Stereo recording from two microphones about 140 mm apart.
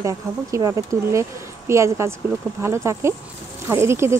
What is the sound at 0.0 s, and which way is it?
Speech, 25° right (ahead or behind).